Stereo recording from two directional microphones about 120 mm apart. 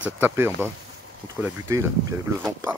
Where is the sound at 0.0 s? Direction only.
15° right (ahead or behind).